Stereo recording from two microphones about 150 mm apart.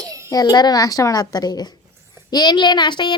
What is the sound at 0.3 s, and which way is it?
A child's voice, 25° left (ahead or behind).